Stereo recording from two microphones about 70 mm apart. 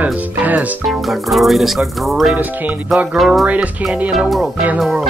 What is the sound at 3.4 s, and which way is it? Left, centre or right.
Speech, right.